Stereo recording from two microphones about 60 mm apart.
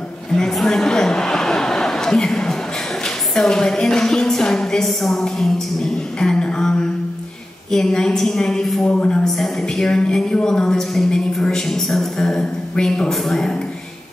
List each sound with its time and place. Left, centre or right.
0.3 s chuckle: centre
3.0 s a woman's voice: centre
8.8 s speech: centre
9.2 s a woman's voice: centre